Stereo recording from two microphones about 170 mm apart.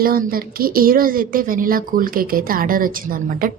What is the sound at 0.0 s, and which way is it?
A woman's voice, 60° right (ahead or behind).